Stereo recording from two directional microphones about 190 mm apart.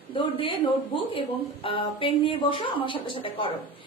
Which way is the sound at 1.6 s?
30° left (ahead or behind).